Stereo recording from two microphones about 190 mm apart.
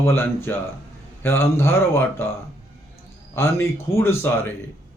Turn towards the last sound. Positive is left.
turn(degrees=10)  # may be behind; listen again after turning